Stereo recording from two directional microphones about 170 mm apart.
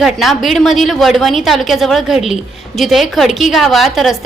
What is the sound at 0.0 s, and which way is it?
A woman's voice, centre (ahead or behind).